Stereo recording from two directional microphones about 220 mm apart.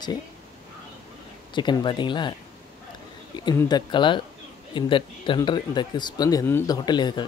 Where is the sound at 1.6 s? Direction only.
20° left (ahead or behind).